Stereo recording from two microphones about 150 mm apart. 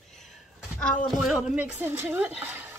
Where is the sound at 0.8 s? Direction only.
5° left (ahead or behind); by 2.3 s 15° right (ahead or behind).